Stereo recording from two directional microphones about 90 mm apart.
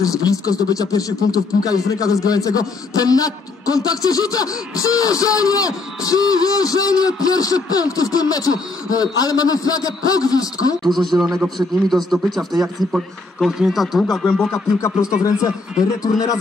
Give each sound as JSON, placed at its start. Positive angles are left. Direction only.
{"t": 0.0, "sound": "a man's voice", "side_deg": 40}
{"t": 11.0, "sound": "speech", "side_deg": 0}
{"t": 16.0, "sound": "a man's voice", "side_deg": 45}